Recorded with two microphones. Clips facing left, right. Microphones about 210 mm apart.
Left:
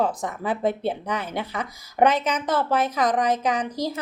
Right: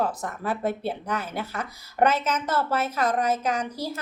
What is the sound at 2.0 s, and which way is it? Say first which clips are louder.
Speech: left 2 dB; 15° left (ahead or behind).